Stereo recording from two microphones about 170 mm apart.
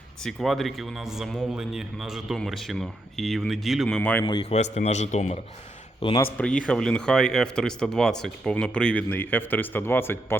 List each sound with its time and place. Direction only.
0.2 s a man's voice: centre (ahead or behind)
4.2 s a man's voice: 25° left (ahead or behind)
4.5 s a man's voice: 40° left (ahead or behind)
6.1 s speech: 10° left (ahead or behind)